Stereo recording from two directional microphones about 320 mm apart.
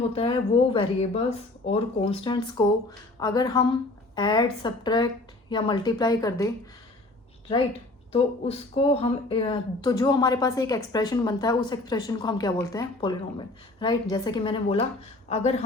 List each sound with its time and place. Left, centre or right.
0.1 s speech: centre
8.1 s speech: centre